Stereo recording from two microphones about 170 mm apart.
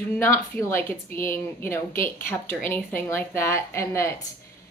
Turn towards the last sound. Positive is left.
turn(degrees=15)  # may be behind; listen again after turning